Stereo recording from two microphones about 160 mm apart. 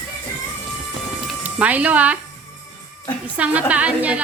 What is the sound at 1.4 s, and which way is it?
Speech, 10° right (ahead or behind).